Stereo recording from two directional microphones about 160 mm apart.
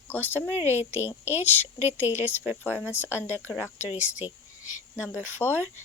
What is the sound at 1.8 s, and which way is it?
Speech, 10° right (ahead or behind).